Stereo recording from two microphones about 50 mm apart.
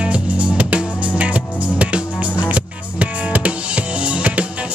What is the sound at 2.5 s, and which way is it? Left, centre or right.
Music, right.